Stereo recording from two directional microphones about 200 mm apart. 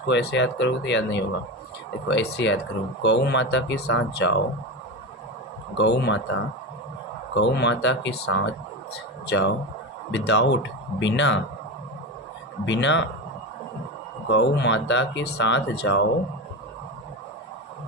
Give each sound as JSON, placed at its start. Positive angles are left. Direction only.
{"t": 0.1, "sound": "speech", "side_deg": 60}
{"t": 5.7, "sound": "speech", "side_deg": 60}
{"t": 12.6, "sound": "speech", "side_deg": 65}
{"t": 14.3, "sound": "speech", "side_deg": 60}